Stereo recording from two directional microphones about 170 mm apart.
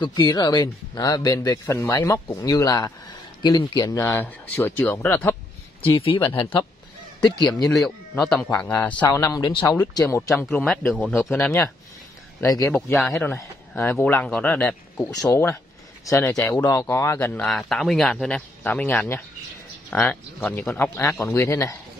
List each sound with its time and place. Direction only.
0.0 s speech: 30° left (ahead or behind); by 5.3 s 10° left (ahead or behind)
5.9 s speech: 30° left (ahead or behind)
8.2 s speech: 5° left (ahead or behind)
17.5 s speech: centre (ahead or behind)